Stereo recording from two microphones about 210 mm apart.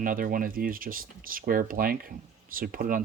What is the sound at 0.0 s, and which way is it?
Speech, 40° right (ahead or behind).